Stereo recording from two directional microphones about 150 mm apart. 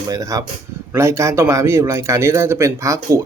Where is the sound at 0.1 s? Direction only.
20° right (ahead or behind).